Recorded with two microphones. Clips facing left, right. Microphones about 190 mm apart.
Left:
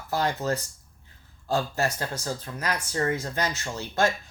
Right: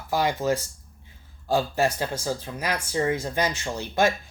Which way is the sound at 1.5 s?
10° right (ahead or behind).